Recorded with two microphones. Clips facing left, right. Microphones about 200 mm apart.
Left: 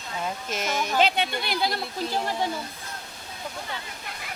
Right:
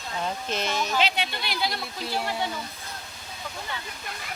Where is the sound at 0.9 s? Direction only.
50° left (ahead or behind).